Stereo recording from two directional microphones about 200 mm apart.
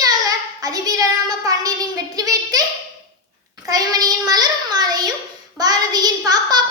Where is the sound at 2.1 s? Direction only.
20° right (ahead or behind).